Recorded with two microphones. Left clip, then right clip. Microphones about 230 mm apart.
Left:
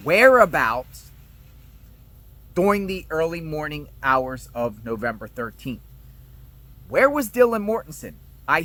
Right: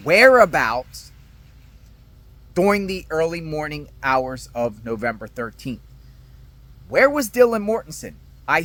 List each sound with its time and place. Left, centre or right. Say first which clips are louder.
0.0 s speech: right 2 dB; centre
2.5 s speech: right 2 dB; centre
6.9 s speech: right 2 dB; centre